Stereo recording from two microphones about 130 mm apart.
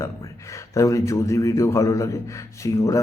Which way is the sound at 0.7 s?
25° left (ahead or behind).